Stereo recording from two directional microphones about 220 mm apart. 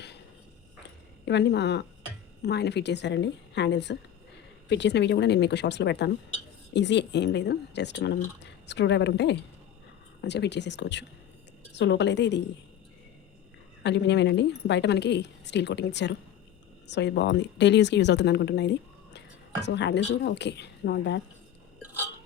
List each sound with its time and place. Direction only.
1.2 s speech: 50° left (ahead or behind)
13.8 s speech: 50° left (ahead or behind)